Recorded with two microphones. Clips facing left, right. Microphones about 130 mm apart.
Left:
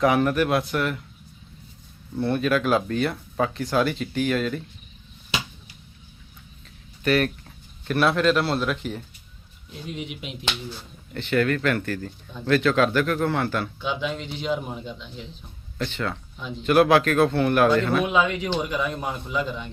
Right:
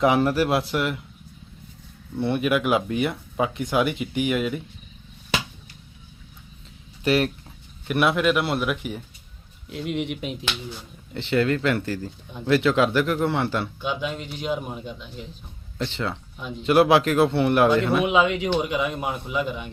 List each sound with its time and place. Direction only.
0.0 s a man's voice: 25° right (ahead or behind)
2.1 s speech: 20° right (ahead or behind)
7.0 s speech: 25° right (ahead or behind)
9.6 s a man's voice: 75° right (ahead or behind)
11.1 s a man's voice: 20° right (ahead or behind)
13.8 s speech: 5° right (ahead or behind)
15.8 s a man's voice: 25° right (ahead or behind)